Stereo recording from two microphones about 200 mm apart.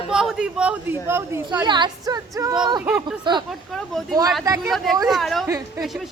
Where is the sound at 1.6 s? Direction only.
20° right (ahead or behind).